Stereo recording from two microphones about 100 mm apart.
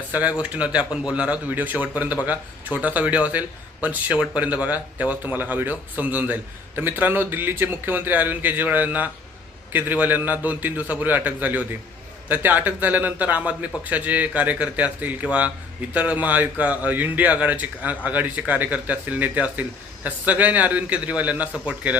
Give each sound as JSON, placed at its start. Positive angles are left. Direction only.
{"t": 0.1, "sound": "a man's voice", "side_deg": -15}